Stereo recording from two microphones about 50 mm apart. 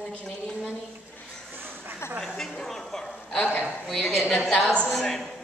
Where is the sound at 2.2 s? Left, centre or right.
Centre.